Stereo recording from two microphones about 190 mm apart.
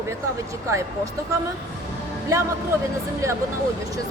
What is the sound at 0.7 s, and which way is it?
Speech, 15° right (ahead or behind).